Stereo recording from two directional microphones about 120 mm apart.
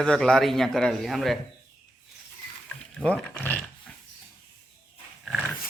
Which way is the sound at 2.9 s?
10° left (ahead or behind).